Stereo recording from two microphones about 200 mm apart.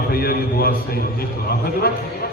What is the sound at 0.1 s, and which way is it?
Speech, 50° left (ahead or behind).